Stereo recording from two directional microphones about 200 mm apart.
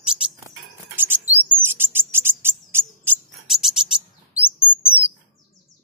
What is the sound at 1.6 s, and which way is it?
Cricket, 10° right (ahead or behind).